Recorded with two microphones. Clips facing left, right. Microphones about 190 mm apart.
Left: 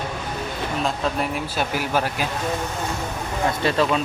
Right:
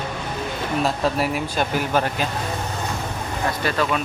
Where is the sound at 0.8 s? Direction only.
5° right (ahead or behind).